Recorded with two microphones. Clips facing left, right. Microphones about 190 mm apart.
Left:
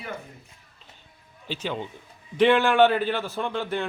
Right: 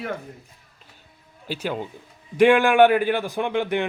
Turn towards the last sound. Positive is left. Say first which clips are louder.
# right 5 dB
turn(degrees=-15)  # may be behind; listen again after turning